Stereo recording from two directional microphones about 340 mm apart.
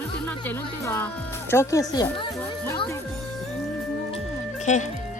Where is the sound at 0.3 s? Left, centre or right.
Centre.